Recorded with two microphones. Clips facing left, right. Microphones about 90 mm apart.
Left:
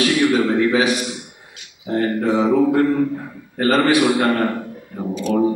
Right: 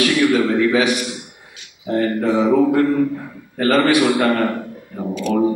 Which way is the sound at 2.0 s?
35° left (ahead or behind).